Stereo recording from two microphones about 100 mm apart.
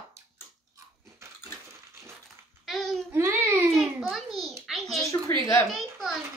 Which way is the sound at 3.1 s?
25° right (ahead or behind).